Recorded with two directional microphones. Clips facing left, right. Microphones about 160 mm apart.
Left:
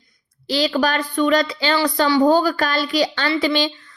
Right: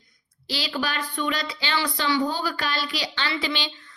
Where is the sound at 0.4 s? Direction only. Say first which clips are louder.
Left 10 dB; 45° left (ahead or behind).